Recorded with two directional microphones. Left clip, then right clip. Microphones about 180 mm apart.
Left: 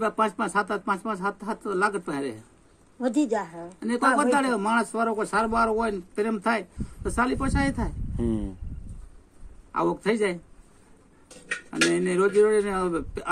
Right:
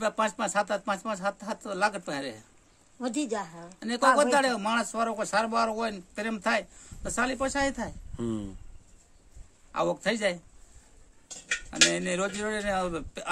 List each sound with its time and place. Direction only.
0.0 s a woman's voice: 25° right (ahead or behind)
9.7 s speech: 25° right (ahead or behind)
11.8 s speech: 20° right (ahead or behind)